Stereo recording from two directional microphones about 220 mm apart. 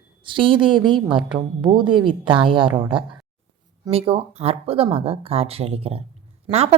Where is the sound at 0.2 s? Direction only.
20° right (ahead or behind).